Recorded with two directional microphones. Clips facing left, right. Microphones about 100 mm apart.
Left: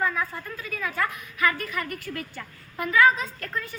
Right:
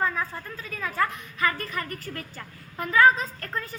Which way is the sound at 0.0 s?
30° right (ahead or behind).